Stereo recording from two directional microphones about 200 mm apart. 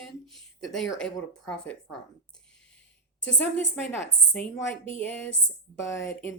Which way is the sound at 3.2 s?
5° left (ahead or behind).